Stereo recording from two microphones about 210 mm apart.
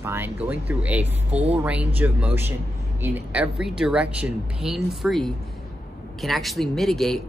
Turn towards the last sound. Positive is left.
turn(degrees=0)  # may be behind; listen again after turning